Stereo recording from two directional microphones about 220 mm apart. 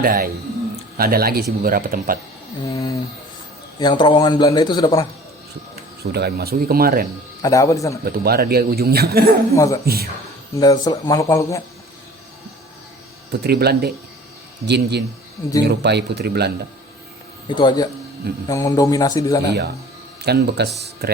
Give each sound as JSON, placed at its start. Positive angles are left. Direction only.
{"t": 0.0, "sound": "speech", "side_deg": -40}
{"t": 2.6, "sound": "a man's voice", "side_deg": 15}
{"t": 6.0, "sound": "speech", "side_deg": -45}
{"t": 7.4, "sound": "speech", "side_deg": 15}
{"t": 8.0, "sound": "speech", "side_deg": -45}
{"t": 9.6, "sound": "speech", "side_deg": 15}
{"t": 9.8, "sound": "speech", "side_deg": -45}
{"t": 10.5, "sound": "speech", "side_deg": 15}
{"t": 13.4, "sound": "speech", "side_deg": -45}
{"t": 17.5, "sound": "a man's voice", "side_deg": 20}
{"t": 20.2, "sound": "speech", "side_deg": -45}